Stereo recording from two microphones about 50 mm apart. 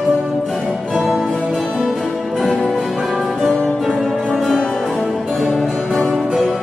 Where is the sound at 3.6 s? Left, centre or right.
Left.